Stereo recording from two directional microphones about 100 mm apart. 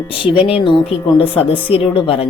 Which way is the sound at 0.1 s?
60° left (ahead or behind).